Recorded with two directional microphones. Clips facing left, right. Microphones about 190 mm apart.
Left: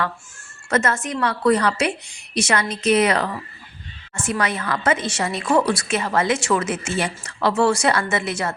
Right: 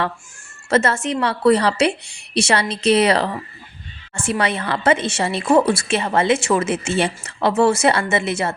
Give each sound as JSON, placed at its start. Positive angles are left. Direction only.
{"t": 0.7, "sound": "a woman's voice", "side_deg": -30}